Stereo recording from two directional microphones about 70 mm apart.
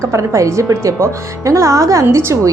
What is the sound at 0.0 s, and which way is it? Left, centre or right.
Speech, right.